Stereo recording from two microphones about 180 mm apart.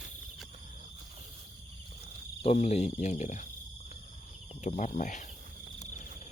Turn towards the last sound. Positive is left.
turn(degrees=45)  # may be behind; listen again after turning